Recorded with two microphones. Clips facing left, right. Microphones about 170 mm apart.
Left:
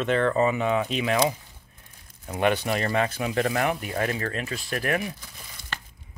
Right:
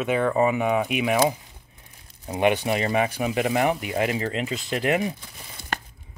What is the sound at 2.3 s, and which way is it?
Speech, 15° right (ahead or behind).